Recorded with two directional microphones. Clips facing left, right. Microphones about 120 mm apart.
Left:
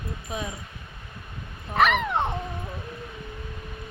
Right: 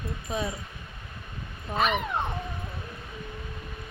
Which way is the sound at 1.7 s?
80° left.